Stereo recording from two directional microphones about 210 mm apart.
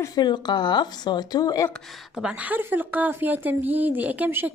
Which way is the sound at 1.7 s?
Centre (ahead or behind).